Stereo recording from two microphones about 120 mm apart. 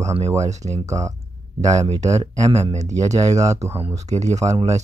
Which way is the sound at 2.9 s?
30° right (ahead or behind).